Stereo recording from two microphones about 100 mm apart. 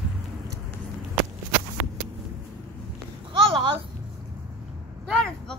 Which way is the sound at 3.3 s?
65° right (ahead or behind).